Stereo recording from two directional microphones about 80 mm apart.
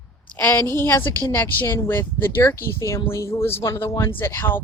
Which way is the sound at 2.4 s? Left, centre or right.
Left.